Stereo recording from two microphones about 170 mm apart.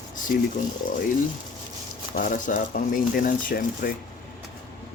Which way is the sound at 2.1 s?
50° left (ahead or behind).